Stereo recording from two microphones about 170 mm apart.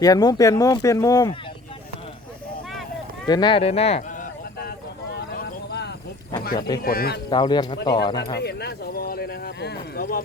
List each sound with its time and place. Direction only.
0.0 s speech: 20° left (ahead or behind)
3.2 s speech: 25° left (ahead or behind)
5.3 s a sound: 70° left (ahead or behind)
6.8 s speech: 65° left (ahead or behind)
7.3 s speech: 25° left (ahead or behind)
8.4 s speech: 70° left (ahead or behind)